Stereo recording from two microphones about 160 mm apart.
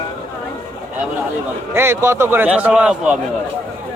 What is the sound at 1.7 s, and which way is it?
A man's voice, 15° right (ahead or behind).